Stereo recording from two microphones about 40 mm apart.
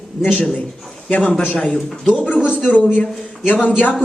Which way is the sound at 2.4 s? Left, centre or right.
Left.